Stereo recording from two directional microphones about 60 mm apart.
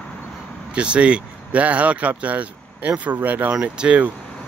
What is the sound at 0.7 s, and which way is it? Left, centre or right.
Speech, centre.